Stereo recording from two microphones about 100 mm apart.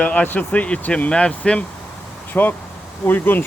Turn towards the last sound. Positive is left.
turn(degrees=20)  # may be behind; listen again after turning